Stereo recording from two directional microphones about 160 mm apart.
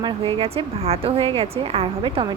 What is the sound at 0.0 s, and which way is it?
Speech, 35° right (ahead or behind).